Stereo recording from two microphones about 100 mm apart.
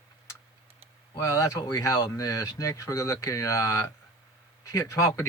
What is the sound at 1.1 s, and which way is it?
Speech, 35° left (ahead or behind).